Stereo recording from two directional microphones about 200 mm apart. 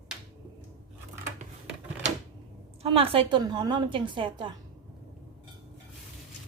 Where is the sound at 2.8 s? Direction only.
25° right (ahead or behind).